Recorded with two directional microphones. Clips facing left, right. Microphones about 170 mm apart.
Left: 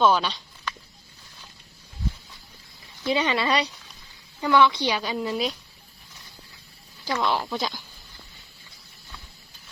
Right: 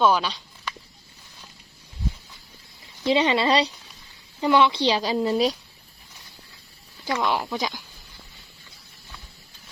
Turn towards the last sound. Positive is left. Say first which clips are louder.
# right 1 dB
turn(degrees=-10)  # may be behind; listen again after turning